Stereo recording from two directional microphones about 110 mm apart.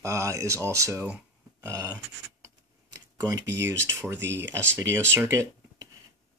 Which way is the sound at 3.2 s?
35° right (ahead or behind).